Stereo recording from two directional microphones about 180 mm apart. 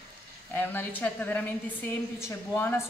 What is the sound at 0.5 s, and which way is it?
A woman's voice, 10° left (ahead or behind).